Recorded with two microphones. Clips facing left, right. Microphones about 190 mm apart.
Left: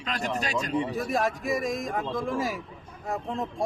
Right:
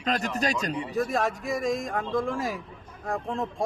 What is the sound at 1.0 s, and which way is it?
Speech, centre (ahead or behind).